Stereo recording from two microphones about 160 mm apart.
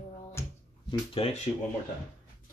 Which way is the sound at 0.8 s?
35° left (ahead or behind).